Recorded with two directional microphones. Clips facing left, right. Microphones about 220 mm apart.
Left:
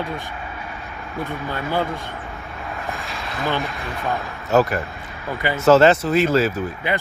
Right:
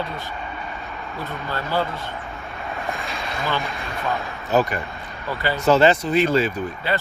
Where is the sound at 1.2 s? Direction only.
15° left (ahead or behind).